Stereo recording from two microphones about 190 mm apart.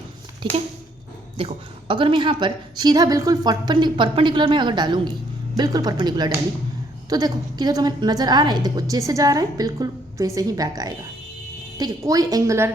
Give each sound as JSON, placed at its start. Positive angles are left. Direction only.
{"t": 1.9, "sound": "a woman's voice", "side_deg": -25}